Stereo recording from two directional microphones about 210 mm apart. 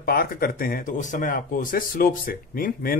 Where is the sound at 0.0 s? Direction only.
45° left (ahead or behind).